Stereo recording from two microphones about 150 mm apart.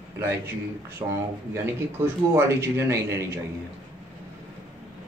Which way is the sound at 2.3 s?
15° right (ahead or behind).